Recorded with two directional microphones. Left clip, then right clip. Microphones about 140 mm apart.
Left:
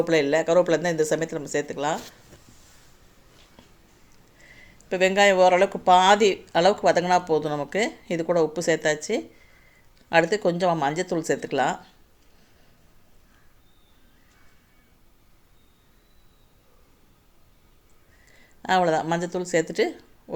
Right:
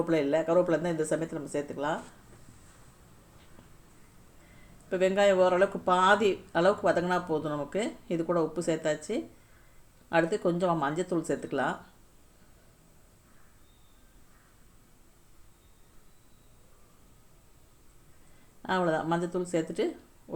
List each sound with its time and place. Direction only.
0.0 s speech: 25° left (ahead or behind)
4.9 s speech: 20° left (ahead or behind)
18.6 s speech: 25° left (ahead or behind)